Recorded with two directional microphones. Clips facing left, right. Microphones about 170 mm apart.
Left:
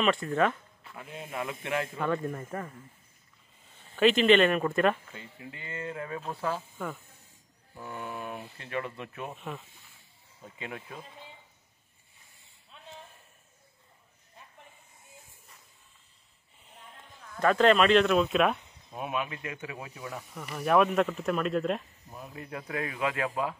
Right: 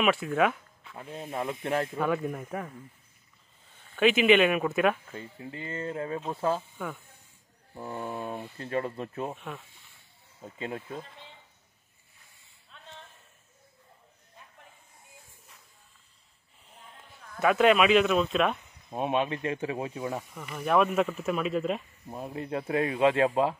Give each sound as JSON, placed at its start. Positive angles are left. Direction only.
{"t": 0.0, "sound": "speech", "side_deg": -5}
{"t": 1.6, "sound": "speech", "side_deg": -45}
{"t": 2.0, "sound": "speech", "side_deg": -5}
{"t": 3.9, "sound": "speech", "side_deg": -5}
{"t": 5.1, "sound": "speech", "side_deg": -35}
{"t": 7.7, "sound": "speech", "side_deg": -30}
{"t": 10.6, "sound": "speech", "side_deg": -30}
{"t": 16.7, "sound": "speech", "side_deg": 0}
{"t": 18.9, "sound": "speech", "side_deg": -30}
{"t": 20.3, "sound": "speech", "side_deg": 0}
{"t": 22.1, "sound": "speech", "side_deg": -30}
{"t": 23.2, "sound": "speech", "side_deg": -35}